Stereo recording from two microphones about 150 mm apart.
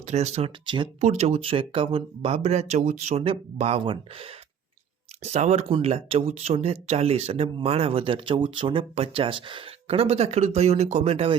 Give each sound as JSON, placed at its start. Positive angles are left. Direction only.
{"t": 0.0, "sound": "speech", "side_deg": -50}
{"t": 0.6, "sound": "speech", "side_deg": -30}
{"t": 1.0, "sound": "speech", "side_deg": -45}